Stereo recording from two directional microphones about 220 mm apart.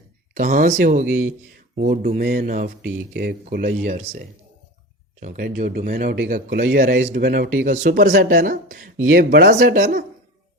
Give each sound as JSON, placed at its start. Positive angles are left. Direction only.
{"t": 0.3, "sound": "speech", "side_deg": -40}